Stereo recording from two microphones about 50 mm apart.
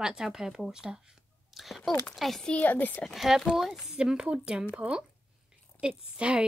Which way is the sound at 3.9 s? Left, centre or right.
Centre.